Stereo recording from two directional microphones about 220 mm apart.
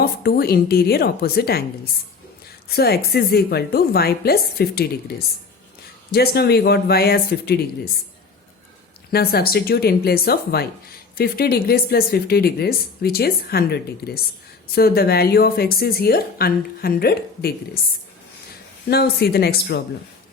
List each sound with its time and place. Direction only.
0.0 s speech: 45° left (ahead or behind)
9.1 s speech: 45° left (ahead or behind)
18.9 s speech: 45° left (ahead or behind)